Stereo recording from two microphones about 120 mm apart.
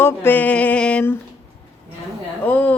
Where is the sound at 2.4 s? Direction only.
15° left (ahead or behind).